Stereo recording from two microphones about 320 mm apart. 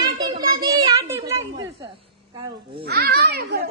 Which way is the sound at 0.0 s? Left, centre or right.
Centre.